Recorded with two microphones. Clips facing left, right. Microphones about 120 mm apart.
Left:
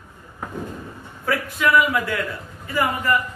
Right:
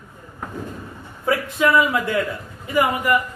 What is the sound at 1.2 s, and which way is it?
A man's voice, 20° right (ahead or behind).